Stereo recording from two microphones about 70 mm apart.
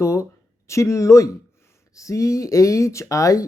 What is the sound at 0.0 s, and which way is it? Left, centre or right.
Speech, left.